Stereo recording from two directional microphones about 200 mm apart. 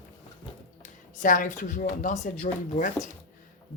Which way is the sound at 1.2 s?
40° left (ahead or behind).